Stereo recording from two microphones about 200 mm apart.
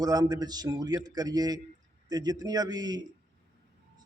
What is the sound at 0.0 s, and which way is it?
A man's voice, 20° right (ahead or behind).